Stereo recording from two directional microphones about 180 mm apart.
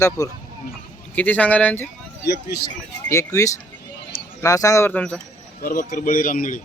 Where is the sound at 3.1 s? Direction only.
15° left (ahead or behind).